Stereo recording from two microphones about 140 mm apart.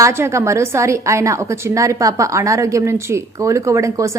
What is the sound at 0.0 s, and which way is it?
A woman's voice, 20° right (ahead or behind).